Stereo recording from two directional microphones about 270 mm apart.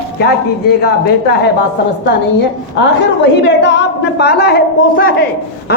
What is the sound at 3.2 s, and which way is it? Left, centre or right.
A man's voice, left.